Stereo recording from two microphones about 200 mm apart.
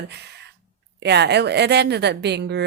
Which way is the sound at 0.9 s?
60° right (ahead or behind).